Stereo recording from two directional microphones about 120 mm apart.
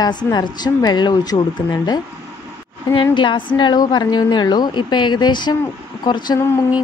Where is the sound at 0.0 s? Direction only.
35° left (ahead or behind).